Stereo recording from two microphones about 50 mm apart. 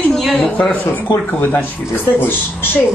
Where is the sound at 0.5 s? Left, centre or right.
Left.